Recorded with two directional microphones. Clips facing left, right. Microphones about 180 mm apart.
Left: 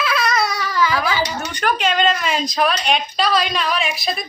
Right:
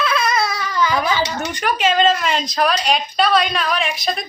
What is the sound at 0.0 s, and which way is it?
Baby cry, centre (ahead or behind).